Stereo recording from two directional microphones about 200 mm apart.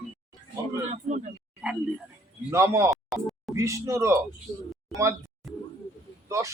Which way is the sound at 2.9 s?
Centre (ahead or behind).